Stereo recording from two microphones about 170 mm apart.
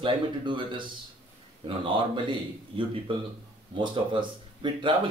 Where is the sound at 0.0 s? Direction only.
30° right (ahead or behind).